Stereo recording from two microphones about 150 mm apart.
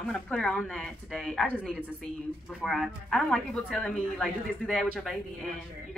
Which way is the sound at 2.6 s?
Centre (ahead or behind).